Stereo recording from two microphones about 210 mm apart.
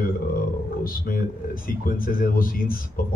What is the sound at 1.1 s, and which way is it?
A man's voice, 40° left (ahead or behind).